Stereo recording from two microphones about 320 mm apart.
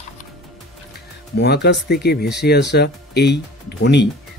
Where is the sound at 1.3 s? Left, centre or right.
Left.